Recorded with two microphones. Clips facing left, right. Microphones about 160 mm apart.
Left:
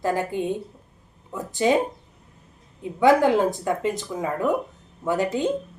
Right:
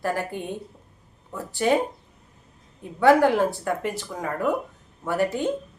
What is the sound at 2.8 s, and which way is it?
A woman's voice, 15° left (ahead or behind).